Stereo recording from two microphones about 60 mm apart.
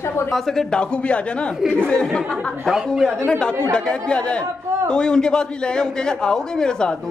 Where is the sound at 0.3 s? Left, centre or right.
Centre.